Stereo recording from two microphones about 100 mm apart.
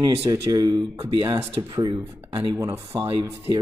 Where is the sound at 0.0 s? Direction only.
35° right (ahead or behind).